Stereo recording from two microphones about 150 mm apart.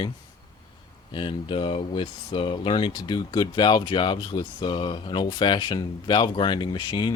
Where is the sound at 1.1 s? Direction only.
35° left (ahead or behind).